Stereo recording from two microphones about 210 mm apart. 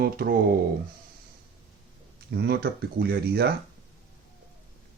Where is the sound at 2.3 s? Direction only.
50° right (ahead or behind).